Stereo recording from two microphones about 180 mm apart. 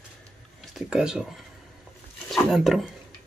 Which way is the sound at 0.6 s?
5° right (ahead or behind).